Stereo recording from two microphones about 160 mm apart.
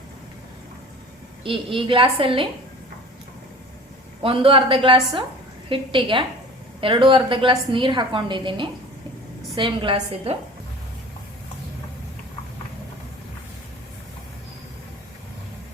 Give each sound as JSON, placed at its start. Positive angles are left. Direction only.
{"t": 1.5, "sound": "a woman's voice", "side_deg": -30}
{"t": 4.2, "sound": "a woman's voice", "side_deg": -35}